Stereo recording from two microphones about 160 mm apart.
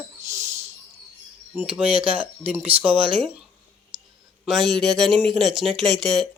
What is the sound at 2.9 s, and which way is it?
Speech, 30° right (ahead or behind).